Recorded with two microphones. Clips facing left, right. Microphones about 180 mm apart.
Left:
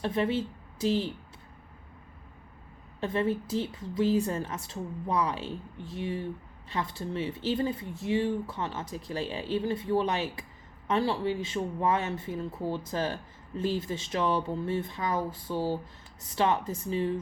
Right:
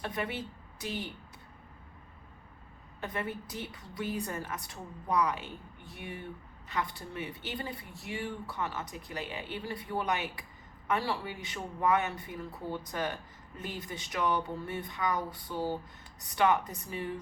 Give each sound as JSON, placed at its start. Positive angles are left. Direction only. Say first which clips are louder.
{"t": 0.0, "sound": "speech", "louder": "left 8 dB", "side_deg": 25}
{"t": 3.0, "sound": "speech", "louder": "left 8 dB", "side_deg": 30}
{"t": 6.7, "sound": "speech", "louder": "left 3 dB", "side_deg": 30}